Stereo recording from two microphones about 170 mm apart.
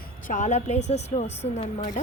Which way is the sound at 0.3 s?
45° left (ahead or behind).